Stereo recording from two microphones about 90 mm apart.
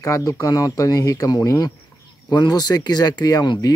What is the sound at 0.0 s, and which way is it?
Speech, 35° left (ahead or behind).